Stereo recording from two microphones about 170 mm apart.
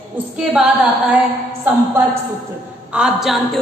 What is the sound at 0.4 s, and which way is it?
Speech, 5° right (ahead or behind).